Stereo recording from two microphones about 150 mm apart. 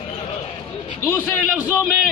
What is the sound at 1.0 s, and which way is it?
Speech, 15° left (ahead or behind).